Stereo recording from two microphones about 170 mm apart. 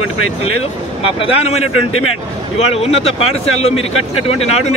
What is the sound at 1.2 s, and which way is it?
A man's voice, 35° left (ahead or behind).